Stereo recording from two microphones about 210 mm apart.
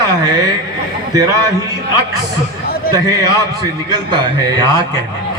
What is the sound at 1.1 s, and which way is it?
Speech, 15° right (ahead or behind).